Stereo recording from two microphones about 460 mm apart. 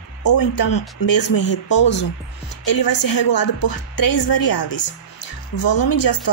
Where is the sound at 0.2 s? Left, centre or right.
Left.